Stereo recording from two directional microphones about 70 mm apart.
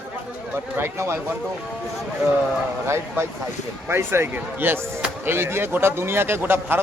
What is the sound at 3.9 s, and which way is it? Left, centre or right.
A man's voice, right.